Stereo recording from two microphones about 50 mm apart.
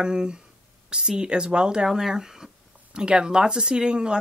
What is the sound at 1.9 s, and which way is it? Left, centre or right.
Speech, centre.